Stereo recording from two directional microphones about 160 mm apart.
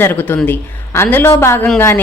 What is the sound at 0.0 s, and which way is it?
A woman's voice, 15° left (ahead or behind).